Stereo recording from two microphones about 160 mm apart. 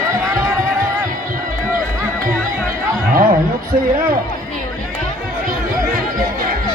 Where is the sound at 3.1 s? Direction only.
60° right (ahead or behind).